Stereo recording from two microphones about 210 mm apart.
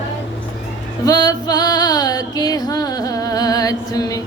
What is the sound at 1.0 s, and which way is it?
Female singing, 20° left (ahead or behind).